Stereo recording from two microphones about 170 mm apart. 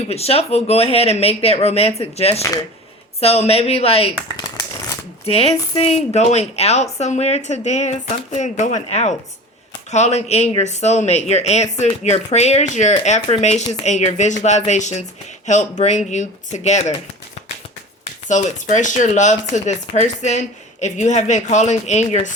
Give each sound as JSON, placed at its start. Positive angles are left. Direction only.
{"t": 0.1, "sound": "speech", "side_deg": 35}
{"t": 2.4, "sound": "speech", "side_deg": 20}
{"t": 3.2, "sound": "speech", "side_deg": 35}
{"t": 5.2, "sound": "speech", "side_deg": 35}
{"t": 18.0, "sound": "speech", "side_deg": 45}